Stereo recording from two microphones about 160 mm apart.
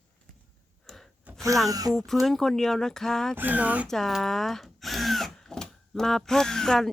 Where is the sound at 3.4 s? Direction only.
10° right (ahead or behind).